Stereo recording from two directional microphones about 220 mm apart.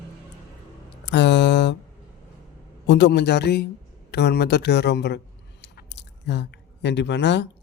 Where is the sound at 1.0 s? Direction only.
50° left (ahead or behind).